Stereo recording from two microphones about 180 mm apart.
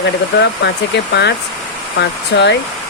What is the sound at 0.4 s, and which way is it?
Speech, 75° left (ahead or behind).